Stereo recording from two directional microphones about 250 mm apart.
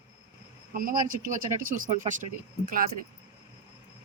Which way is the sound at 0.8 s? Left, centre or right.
Right.